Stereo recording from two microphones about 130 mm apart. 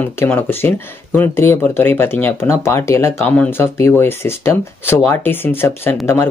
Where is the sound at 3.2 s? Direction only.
10° left (ahead or behind).